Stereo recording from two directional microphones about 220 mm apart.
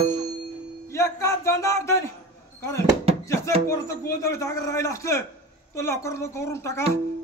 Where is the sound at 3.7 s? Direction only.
15° left (ahead or behind).